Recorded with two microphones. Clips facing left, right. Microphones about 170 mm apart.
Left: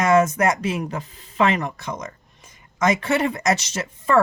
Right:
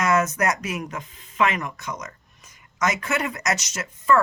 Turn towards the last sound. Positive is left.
turn(degrees=30)  # may be behind; listen again after turning